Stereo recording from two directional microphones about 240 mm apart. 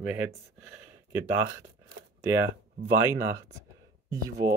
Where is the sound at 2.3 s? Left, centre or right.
Centre.